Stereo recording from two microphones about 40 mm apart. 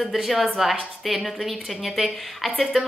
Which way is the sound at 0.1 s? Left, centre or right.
Centre.